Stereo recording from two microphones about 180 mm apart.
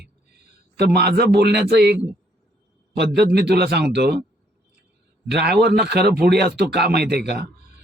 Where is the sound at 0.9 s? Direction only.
60° right (ahead or behind).